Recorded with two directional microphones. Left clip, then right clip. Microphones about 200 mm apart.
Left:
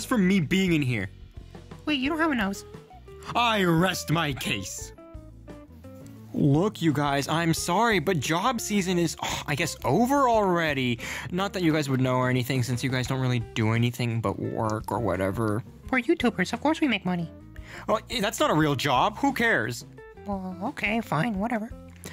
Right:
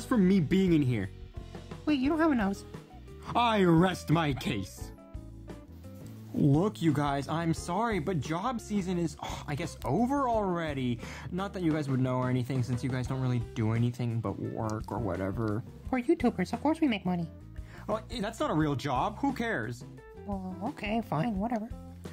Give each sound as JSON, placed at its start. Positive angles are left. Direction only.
{"t": 0.0, "sound": "speech", "side_deg": 10}
{"t": 6.3, "sound": "speech", "side_deg": 15}
{"t": 14.5, "sound": "speech", "side_deg": 30}
{"t": 15.0, "sound": "speech", "side_deg": 20}
{"t": 15.9, "sound": "speech", "side_deg": 5}
{"t": 17.7, "sound": "speech", "side_deg": 15}